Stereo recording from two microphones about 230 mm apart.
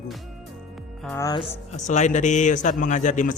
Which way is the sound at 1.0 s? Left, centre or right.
Centre.